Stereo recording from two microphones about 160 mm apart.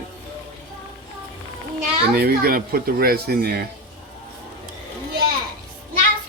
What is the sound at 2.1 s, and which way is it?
Speech, 70° right (ahead or behind).